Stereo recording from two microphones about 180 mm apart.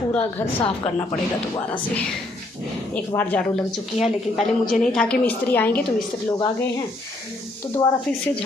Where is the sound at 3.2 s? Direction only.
10° left (ahead or behind).